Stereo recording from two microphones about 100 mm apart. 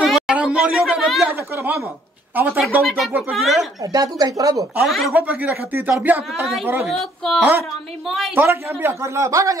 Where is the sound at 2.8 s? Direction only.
Centre (ahead or behind).